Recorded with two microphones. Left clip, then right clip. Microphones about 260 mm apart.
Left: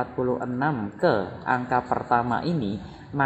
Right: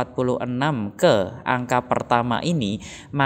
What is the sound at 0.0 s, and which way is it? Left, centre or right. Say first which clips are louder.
Speech: right 3 dB; right.